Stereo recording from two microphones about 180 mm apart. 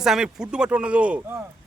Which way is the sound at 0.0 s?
5° right (ahead or behind).